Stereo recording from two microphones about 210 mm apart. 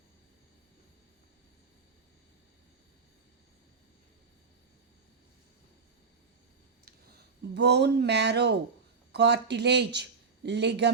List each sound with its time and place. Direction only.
7.5 s speech: 55° right (ahead or behind)